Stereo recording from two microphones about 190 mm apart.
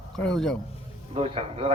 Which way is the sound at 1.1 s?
30° right (ahead or behind).